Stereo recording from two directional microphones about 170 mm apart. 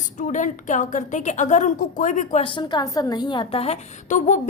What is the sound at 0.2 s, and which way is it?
A woman's voice, 45° left (ahead or behind).